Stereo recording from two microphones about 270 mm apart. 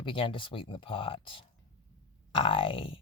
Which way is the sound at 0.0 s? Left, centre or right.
Centre.